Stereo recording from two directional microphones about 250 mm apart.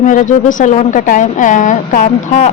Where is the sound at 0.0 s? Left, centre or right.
Left.